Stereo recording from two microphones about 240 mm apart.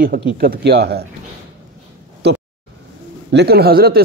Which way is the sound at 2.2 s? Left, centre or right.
Right.